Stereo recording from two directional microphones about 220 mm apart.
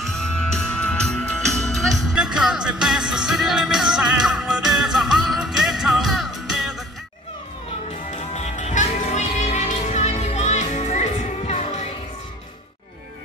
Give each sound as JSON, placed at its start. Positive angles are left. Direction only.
{"t": 0.0, "sound": "music", "side_deg": 0}
{"t": 8.1, "sound": "music", "side_deg": 30}